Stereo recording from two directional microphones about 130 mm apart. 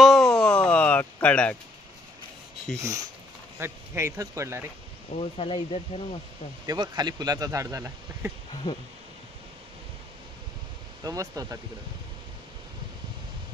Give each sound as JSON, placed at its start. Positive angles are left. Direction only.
{"t": 0.0, "sound": "a sound", "side_deg": 0}
{"t": 2.8, "sound": "speech", "side_deg": -25}
{"t": 5.1, "sound": "speech", "side_deg": 50}
{"t": 6.6, "sound": "speech", "side_deg": -30}
{"t": 11.1, "sound": "speech", "side_deg": -25}